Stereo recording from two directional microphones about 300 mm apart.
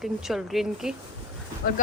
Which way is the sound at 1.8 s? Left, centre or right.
Left.